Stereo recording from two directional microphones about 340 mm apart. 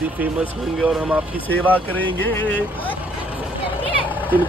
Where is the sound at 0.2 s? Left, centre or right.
Centre.